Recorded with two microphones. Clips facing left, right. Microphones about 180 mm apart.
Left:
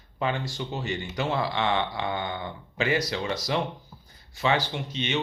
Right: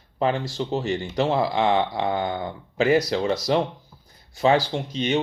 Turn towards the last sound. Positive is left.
turn(degrees=-40)  # may be behind; listen again after turning